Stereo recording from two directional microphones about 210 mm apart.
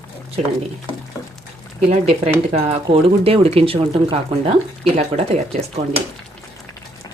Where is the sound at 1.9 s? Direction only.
30° right (ahead or behind).